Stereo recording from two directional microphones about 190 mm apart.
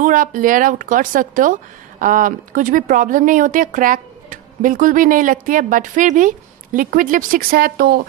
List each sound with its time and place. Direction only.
0.0 s speech: 45° right (ahead or behind)